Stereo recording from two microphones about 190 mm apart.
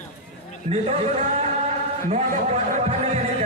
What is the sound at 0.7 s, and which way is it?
Speech, 35° right (ahead or behind).